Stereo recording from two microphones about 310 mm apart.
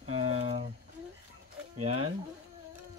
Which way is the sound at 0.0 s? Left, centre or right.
Centre.